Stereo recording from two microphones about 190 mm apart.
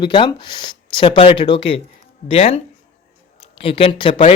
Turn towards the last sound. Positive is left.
turn(degrees=25)  # may be behind; listen again after turning